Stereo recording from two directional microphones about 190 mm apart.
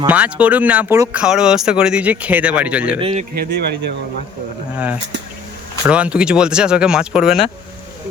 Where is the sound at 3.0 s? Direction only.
30° right (ahead or behind).